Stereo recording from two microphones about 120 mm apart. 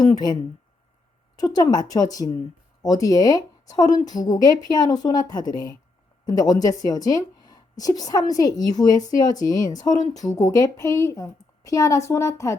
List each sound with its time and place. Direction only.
1.4 s a woman's voice: 35° left (ahead or behind)